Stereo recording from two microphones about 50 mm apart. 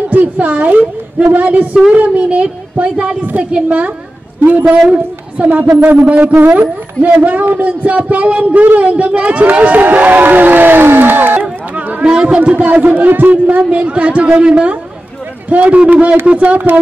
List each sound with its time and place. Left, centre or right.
0.1 s a woman's voice: right
5.5 s a woman's voice: right
12.0 s speech: centre; by 13.6 s right
13.6 s a woman's voice: right